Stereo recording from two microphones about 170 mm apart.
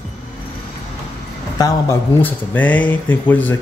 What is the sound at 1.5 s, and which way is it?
Speech, 20° left (ahead or behind).